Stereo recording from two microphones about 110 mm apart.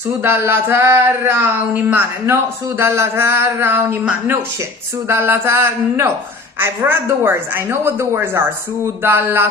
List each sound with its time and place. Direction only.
0.2 s speech: 20° right (ahead or behind)
5.0 s speech: 25° right (ahead or behind)